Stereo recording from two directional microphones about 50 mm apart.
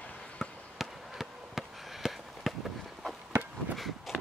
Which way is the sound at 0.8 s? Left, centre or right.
Centre.